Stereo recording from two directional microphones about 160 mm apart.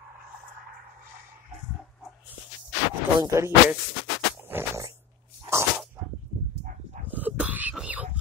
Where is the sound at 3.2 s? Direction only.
20° right (ahead or behind).